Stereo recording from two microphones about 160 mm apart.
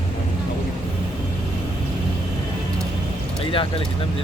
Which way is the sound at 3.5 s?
35° left (ahead or behind).